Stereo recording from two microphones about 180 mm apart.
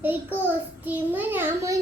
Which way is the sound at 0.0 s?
10° right (ahead or behind).